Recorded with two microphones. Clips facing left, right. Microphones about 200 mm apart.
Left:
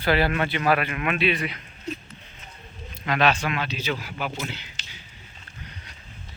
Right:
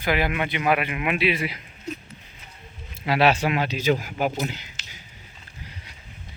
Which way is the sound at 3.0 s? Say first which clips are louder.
Right 3 dB; 10° right (ahead or behind).